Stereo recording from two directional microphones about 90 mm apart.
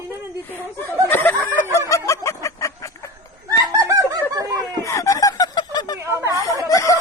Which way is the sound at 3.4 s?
40° right (ahead or behind).